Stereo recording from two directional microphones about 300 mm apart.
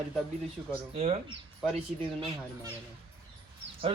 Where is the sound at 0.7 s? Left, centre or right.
Centre.